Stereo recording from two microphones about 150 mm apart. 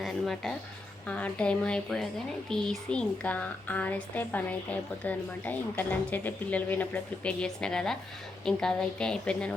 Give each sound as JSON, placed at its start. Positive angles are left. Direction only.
{"t": 0.0, "sound": "a woman's voice", "side_deg": 0}